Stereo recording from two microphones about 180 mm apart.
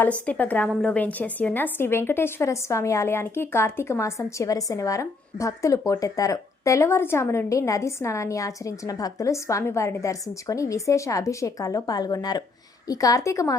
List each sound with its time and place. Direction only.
0.0 s a woman's voice: 10° left (ahead or behind)